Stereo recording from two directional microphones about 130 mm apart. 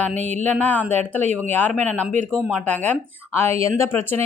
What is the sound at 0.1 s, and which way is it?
Speech, 65° right (ahead or behind).